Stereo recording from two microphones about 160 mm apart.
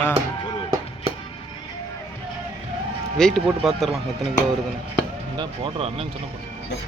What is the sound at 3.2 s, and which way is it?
Speech, centre (ahead or behind).